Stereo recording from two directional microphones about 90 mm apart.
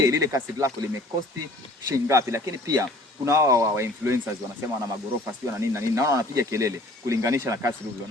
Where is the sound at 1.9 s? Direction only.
35° right (ahead or behind).